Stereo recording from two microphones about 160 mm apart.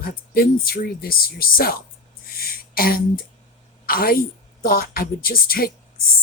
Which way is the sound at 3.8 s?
65° left (ahead or behind).